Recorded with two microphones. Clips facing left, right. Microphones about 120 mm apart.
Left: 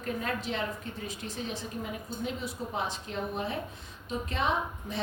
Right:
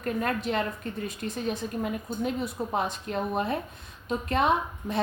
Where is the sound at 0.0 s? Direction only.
55° right (ahead or behind).